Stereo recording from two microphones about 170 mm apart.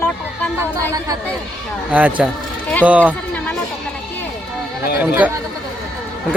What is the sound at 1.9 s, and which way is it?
Speech, 10° right (ahead or behind).